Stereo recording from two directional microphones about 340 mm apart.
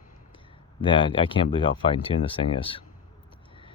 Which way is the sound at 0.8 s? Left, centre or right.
Centre.